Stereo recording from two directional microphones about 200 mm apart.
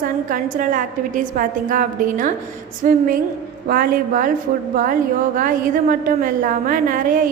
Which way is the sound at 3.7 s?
45° right (ahead or behind).